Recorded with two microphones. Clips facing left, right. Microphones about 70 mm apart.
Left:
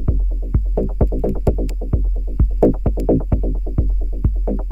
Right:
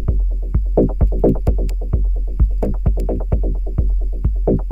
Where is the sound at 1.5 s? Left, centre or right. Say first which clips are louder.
Left 4 dB; centre.